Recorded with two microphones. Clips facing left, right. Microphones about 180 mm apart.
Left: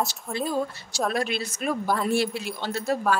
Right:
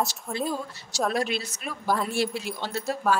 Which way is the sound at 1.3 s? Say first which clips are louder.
Left 4 dB; 50° left (ahead or behind).